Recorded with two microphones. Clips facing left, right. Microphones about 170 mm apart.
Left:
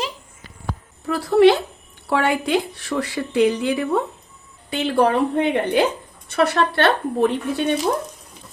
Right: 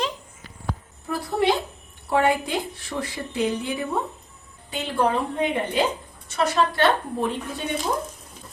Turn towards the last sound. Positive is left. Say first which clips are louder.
# left 8 dB
turn(degrees=75)  # may be behind; listen again after turning